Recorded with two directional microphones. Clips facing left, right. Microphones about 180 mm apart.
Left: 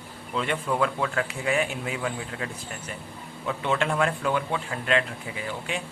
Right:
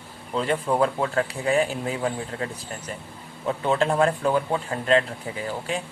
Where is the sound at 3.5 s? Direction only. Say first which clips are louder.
Right 4 dB; 35° right (ahead or behind).